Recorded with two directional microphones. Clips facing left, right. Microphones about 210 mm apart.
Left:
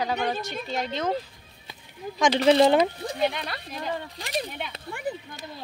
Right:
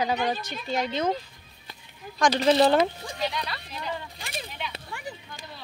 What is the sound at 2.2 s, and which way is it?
Speech, 20° left (ahead or behind).